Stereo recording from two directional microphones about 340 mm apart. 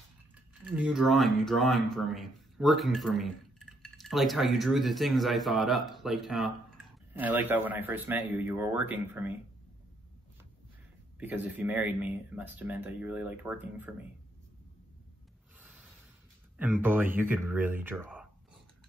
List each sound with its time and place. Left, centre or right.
0.7 s speech: centre
11.1 s speech: centre
15.6 s a sound: centre
16.5 s speech: centre